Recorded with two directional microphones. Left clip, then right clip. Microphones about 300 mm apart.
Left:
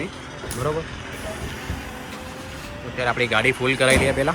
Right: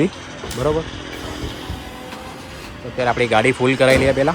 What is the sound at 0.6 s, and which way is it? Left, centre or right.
Speech, centre.